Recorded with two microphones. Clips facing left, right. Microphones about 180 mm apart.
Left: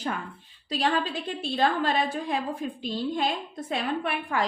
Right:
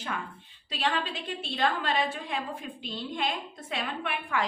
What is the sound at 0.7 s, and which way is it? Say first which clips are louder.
A woman's voice: left 4 dB; 40° left (ahead or behind).